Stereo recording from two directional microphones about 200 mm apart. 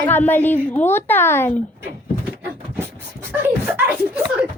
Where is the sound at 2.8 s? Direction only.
10° right (ahead or behind).